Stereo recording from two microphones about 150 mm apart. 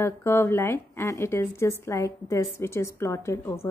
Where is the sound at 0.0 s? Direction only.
15° left (ahead or behind).